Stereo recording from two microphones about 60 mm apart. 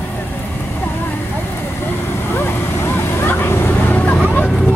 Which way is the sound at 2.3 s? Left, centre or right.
Left.